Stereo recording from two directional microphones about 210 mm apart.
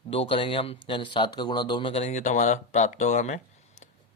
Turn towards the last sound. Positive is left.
turn(degrees=35)  # may be behind; listen again after turning